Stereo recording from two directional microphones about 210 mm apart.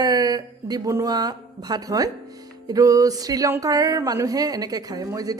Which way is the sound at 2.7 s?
15° right (ahead or behind).